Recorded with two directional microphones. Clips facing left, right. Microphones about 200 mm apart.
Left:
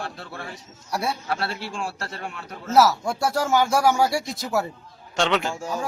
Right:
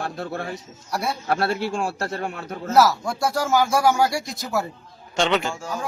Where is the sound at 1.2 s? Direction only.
45° right (ahead or behind).